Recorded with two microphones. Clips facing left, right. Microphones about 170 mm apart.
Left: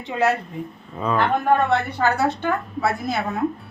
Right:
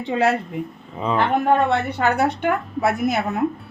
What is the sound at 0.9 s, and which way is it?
Speech, 20° right (ahead or behind).